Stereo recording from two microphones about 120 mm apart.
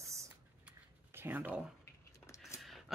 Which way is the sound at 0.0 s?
25° right (ahead or behind).